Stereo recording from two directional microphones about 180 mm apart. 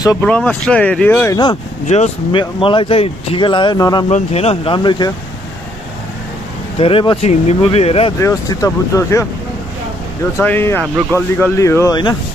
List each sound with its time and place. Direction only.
0.2 s speech: 5° left (ahead or behind)
1.3 s speech: 25° left (ahead or behind)
1.9 s speech: 40° left (ahead or behind); by 4.0 s 20° left (ahead or behind)
4.1 s speech: 35° left (ahead or behind)
6.8 s speech: 30° left (ahead or behind)
8.2 s speech: 20° left (ahead or behind)
10.3 s speech: 10° left (ahead or behind)